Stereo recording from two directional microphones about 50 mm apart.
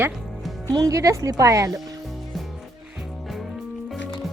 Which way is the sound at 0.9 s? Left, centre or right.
Right.